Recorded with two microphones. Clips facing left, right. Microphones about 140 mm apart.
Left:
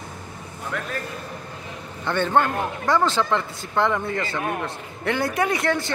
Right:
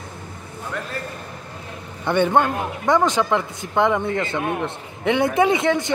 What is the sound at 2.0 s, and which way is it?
A man's voice, 15° right (ahead or behind).